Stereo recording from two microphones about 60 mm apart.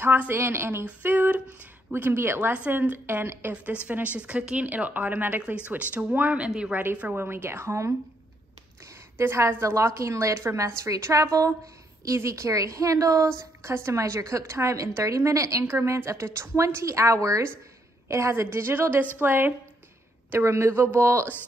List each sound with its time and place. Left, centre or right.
0.3 s a woman's voice: right
0.8 s a woman's voice: right
3.6 s speech: right
7.2 s a woman's voice: right
9.2 s a woman's voice: right
12.0 s a woman's voice: right
13.4 s a woman's voice: right
15.6 s a woman's voice: right
20.2 s a woman's voice: right